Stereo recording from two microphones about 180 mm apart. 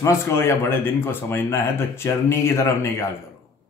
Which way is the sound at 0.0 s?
15° left (ahead or behind).